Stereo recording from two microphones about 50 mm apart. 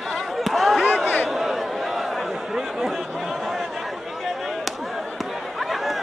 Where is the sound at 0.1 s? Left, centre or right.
Centre.